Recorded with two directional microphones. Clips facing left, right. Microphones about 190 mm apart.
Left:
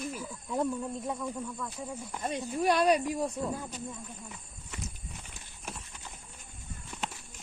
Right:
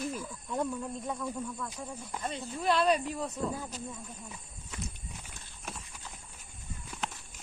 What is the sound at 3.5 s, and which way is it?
Speech, centre (ahead or behind).